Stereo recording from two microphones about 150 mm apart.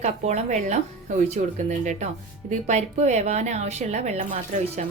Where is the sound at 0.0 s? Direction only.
50° right (ahead or behind).